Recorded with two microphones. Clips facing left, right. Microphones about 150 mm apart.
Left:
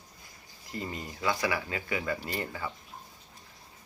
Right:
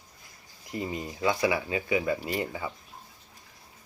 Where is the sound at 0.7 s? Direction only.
20° right (ahead or behind).